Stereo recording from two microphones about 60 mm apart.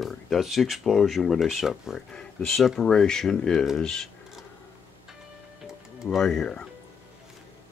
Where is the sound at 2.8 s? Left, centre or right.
Centre.